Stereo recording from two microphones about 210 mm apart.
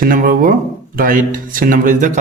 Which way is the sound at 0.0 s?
40° right (ahead or behind).